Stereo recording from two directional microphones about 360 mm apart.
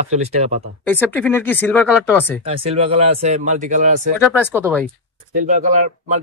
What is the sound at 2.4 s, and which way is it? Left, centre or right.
Speech, centre.